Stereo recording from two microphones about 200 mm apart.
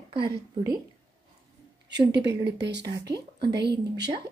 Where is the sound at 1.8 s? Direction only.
60° right (ahead or behind).